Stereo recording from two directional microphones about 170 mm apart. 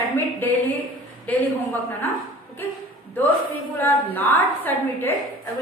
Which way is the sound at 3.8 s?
10° left (ahead or behind).